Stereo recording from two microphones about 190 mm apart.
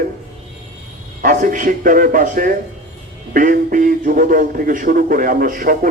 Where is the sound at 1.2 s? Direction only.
45° right (ahead or behind).